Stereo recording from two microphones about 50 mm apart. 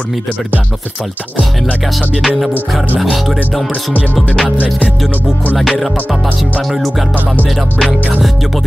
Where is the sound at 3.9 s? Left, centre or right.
Left.